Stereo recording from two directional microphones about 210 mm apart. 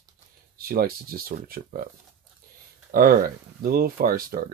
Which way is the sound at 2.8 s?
45° right (ahead or behind).